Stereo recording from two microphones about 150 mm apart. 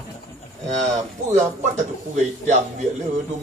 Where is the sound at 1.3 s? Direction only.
50° right (ahead or behind).